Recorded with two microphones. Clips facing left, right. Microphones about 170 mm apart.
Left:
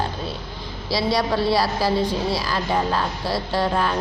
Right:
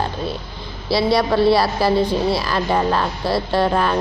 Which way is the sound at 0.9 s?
60° right (ahead or behind).